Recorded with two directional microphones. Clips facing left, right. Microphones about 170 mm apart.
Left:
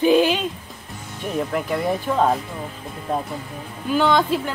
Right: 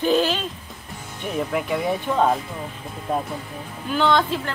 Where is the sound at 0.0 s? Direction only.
10° left (ahead or behind).